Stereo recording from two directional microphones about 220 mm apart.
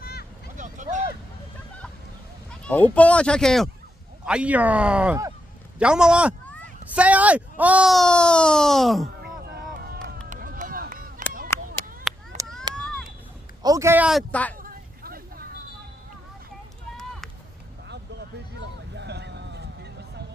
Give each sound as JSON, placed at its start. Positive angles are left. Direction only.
{"t": 0.0, "sound": "vehicle", "side_deg": 45}
{"t": 0.6, "sound": "a sound", "side_deg": -35}
{"t": 2.6, "sound": "speech", "side_deg": 5}
{"t": 9.2, "sound": "run", "side_deg": -45}
{"t": 11.5, "sound": "clapping", "side_deg": 15}
{"t": 12.4, "sound": "a sound", "side_deg": -15}
{"t": 13.6, "sound": "speech", "side_deg": -15}
{"t": 14.6, "sound": "vehicle", "side_deg": -40}
{"t": 18.6, "sound": "a sound", "side_deg": -50}